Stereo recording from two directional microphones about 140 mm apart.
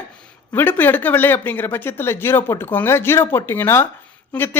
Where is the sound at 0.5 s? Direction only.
15° left (ahead or behind).